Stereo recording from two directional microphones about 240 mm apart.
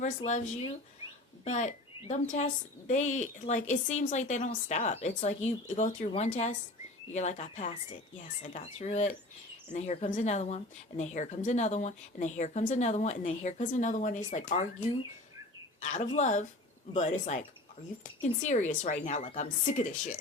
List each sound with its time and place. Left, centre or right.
0.2 s a woman's voice: left